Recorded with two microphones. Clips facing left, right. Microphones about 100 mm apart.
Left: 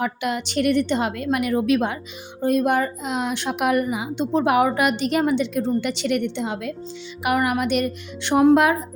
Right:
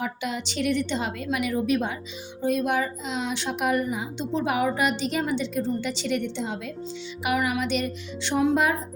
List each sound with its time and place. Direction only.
0.0 s a woman's voice: 60° left (ahead or behind)
1.6 s speech: 75° left (ahead or behind)
2.4 s a woman's voice: 50° left (ahead or behind); by 4.0 s 70° left (ahead or behind)
4.2 s a woman's voice: 55° left (ahead or behind)
7.3 s a woman's voice: 55° left (ahead or behind)